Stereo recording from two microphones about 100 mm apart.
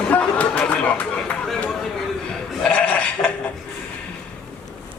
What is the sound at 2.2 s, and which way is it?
Sheep, 5° left (ahead or behind).